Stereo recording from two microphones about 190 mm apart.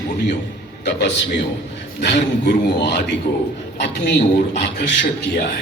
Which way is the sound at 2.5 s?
65° left (ahead or behind).